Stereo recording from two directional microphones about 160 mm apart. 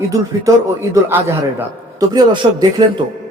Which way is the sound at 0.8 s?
20° right (ahead or behind).